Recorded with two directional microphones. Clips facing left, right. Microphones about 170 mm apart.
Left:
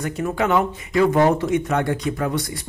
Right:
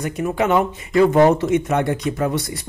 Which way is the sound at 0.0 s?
20° right (ahead or behind).